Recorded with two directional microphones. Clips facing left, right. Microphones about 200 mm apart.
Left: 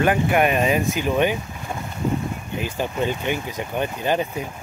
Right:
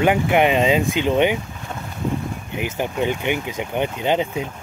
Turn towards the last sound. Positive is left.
turn(degrees=-20)  # may be behind; listen again after turning